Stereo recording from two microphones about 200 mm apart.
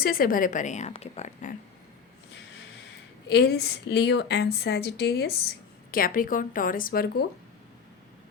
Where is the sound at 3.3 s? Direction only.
55° left (ahead or behind).